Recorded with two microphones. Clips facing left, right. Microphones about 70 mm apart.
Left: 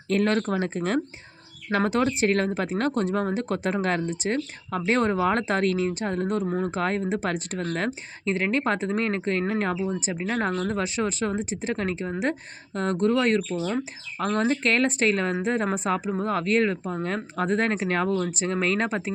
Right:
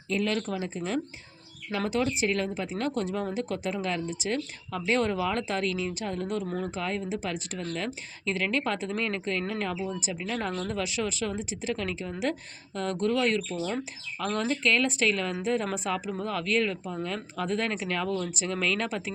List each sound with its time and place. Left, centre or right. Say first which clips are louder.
0.1 s speech: left 6 dB; left